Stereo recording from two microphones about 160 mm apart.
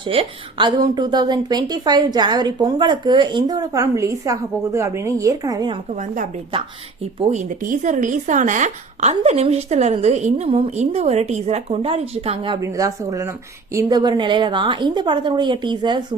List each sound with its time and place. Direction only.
0.1 s a woman's voice: 35° right (ahead or behind)
7.2 s speech: 45° right (ahead or behind)
12.6 s a woman's voice: 20° right (ahead or behind)